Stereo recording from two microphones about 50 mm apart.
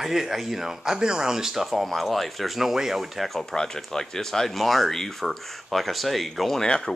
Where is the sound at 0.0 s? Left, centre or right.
Centre.